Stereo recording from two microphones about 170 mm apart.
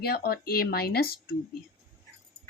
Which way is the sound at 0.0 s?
65° left (ahead or behind).